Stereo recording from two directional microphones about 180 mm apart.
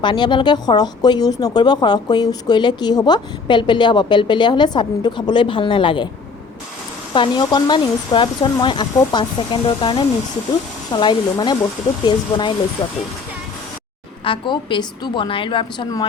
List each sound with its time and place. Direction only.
0.0 s speech: 25° left (ahead or behind)
7.1 s speech: 25° left (ahead or behind)
14.3 s speech: 25° left (ahead or behind)